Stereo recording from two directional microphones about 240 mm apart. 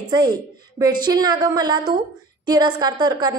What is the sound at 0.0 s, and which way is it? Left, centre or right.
A woman's voice, centre.